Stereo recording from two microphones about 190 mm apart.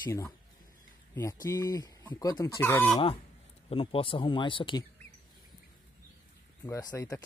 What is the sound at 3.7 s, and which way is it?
Speech, 30° left (ahead or behind).